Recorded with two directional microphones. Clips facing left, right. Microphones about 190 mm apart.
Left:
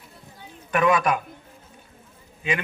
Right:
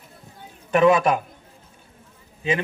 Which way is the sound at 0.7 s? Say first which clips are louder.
Right 4 dB; 25° right (ahead or behind).